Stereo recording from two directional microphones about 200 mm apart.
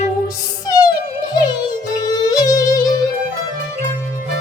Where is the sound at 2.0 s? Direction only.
20° left (ahead or behind).